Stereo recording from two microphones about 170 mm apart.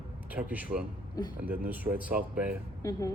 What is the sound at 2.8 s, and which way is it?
Speech, 20° left (ahead or behind).